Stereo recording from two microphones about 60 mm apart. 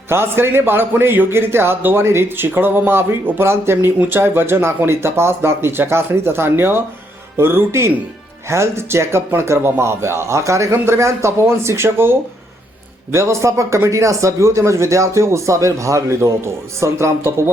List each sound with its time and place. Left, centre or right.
0.1 s speech: right
16.8 s speech: right